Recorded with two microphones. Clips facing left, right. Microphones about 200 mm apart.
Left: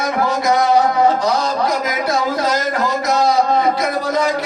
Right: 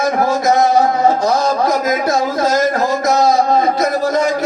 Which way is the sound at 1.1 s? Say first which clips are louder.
Right 3 dB; 45° right (ahead or behind).